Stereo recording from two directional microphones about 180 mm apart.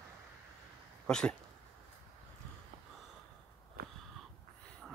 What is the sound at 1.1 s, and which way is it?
Speech, 5° left (ahead or behind).